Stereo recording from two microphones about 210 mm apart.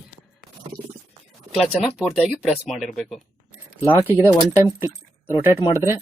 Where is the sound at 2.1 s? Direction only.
Centre (ahead or behind).